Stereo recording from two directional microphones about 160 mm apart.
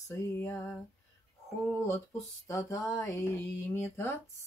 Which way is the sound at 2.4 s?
20° left (ahead or behind).